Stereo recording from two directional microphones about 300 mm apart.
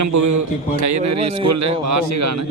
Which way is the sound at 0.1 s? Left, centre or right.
Right.